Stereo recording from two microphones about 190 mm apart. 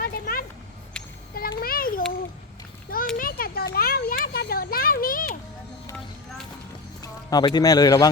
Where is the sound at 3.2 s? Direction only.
50° left (ahead or behind).